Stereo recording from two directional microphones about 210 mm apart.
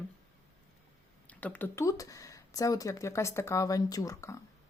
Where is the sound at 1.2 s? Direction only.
5° left (ahead or behind).